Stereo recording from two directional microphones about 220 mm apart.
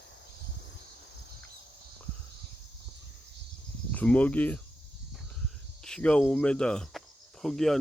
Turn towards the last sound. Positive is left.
turn(degrees=0)  # may be behind; listen again after turning